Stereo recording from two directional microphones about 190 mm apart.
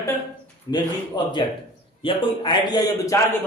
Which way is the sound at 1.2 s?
25° left (ahead or behind).